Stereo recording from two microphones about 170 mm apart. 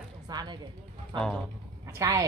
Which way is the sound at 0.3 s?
25° right (ahead or behind).